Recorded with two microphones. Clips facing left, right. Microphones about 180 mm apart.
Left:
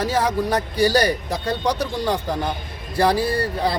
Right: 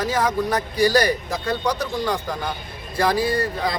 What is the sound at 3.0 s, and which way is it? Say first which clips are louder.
Speech: left 1 dB; 30° left (ahead or behind).